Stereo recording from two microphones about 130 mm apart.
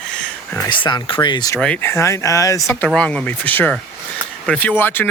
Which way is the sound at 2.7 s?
10° left (ahead or behind).